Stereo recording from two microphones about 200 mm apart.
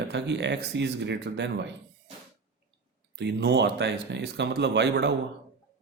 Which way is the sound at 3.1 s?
55° right (ahead or behind).